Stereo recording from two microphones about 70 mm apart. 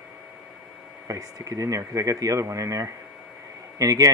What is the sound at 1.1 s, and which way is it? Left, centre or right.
Speech, right.